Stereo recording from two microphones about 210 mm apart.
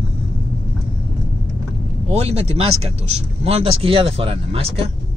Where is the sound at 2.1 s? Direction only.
30° right (ahead or behind).